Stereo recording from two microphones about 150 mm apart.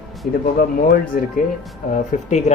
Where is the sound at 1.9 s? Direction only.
50° left (ahead or behind).